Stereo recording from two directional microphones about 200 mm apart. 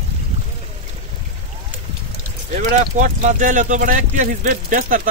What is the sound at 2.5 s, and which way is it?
Speech, 40° right (ahead or behind).